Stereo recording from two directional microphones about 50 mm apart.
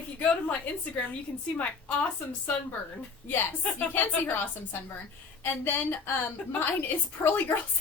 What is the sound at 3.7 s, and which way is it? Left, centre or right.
A woman's voice, left.